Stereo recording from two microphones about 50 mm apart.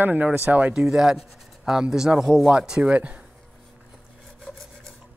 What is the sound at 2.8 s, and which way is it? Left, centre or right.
Speech, right.